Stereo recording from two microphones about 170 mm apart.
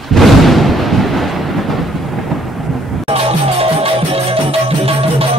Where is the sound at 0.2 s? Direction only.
Centre (ahead or behind).